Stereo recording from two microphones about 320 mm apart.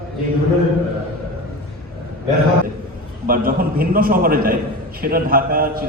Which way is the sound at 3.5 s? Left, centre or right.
Right.